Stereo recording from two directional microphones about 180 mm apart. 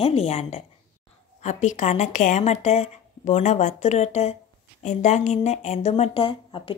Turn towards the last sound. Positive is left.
turn(degrees=30)  # may be behind; listen again after turning